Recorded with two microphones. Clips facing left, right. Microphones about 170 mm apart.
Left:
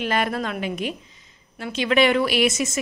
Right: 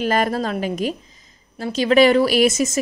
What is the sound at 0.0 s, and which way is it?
A woman's voice, 40° right (ahead or behind).